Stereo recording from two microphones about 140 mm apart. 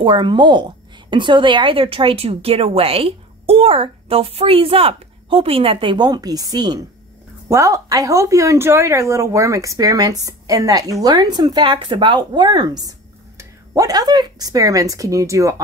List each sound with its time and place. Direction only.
0.0 s a woman's voice: 35° right (ahead or behind)